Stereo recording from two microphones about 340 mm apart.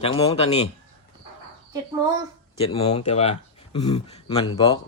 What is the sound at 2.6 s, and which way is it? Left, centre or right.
Speech, centre.